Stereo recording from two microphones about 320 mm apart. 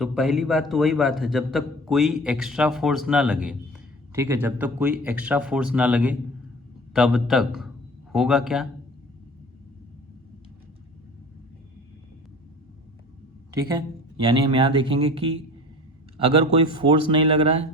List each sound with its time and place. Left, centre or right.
0.0 s a man's voice: centre
13.7 s speech: centre
16.7 s speech: centre